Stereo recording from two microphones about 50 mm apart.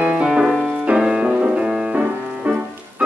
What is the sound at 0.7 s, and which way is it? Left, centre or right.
Music, right.